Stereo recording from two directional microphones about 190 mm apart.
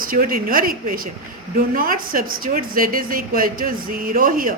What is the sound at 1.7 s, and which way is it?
A woman's voice, 50° right (ahead or behind).